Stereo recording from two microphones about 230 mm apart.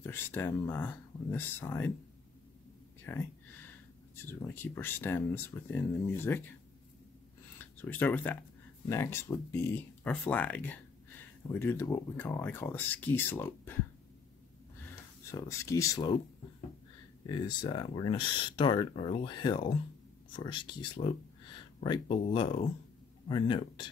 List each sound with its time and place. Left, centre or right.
0.0 s speech: centre
3.1 s speech: centre
7.7 s speech: centre
15.3 s speech: centre
17.3 s speech: centre